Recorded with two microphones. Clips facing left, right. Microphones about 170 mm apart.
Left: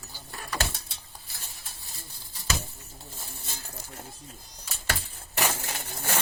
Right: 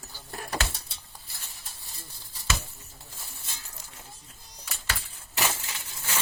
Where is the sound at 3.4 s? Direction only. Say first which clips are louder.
Left 5 dB; 45° left (ahead or behind).